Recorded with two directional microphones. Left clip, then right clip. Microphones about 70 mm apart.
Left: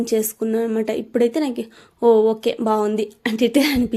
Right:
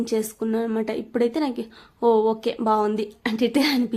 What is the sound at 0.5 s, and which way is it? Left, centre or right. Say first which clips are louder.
Speech: left 4 dB; left.